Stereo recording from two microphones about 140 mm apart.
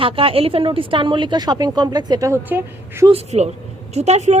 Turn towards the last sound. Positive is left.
turn(degrees=-55)  # may be behind; listen again after turning